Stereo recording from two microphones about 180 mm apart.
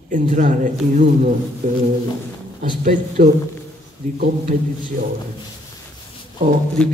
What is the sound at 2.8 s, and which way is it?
Speech, 50° right (ahead or behind).